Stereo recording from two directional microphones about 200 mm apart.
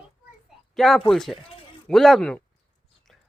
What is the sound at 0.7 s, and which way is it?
Speech, centre (ahead or behind).